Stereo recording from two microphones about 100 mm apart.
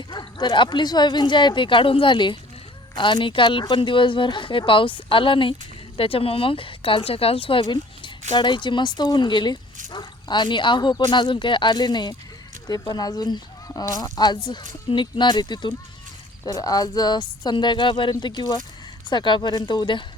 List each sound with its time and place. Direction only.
0.1 s speech: 50° left (ahead or behind)